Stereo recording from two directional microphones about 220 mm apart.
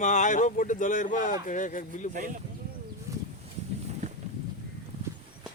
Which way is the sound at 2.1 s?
35° right (ahead or behind).